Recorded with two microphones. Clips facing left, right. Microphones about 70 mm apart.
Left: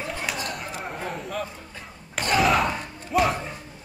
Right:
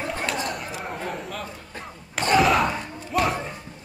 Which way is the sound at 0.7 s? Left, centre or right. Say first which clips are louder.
Right 1 dB; centre.